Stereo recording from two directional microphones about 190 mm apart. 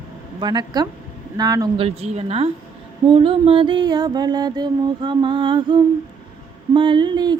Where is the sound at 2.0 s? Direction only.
35° right (ahead or behind).